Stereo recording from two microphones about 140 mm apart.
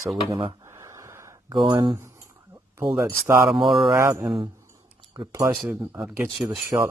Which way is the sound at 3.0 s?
20° right (ahead or behind).